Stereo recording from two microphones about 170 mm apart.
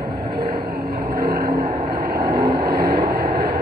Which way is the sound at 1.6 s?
35° right (ahead or behind).